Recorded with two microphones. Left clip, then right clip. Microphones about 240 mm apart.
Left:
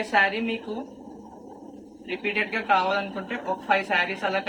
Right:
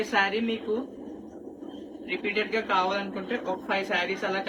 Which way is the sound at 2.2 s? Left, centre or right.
Left.